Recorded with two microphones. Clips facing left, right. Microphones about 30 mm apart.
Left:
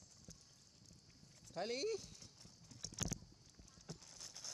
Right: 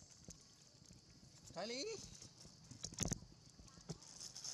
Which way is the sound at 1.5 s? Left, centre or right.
Centre.